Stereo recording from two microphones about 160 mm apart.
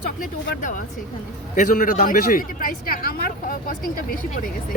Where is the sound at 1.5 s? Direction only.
50° left (ahead or behind).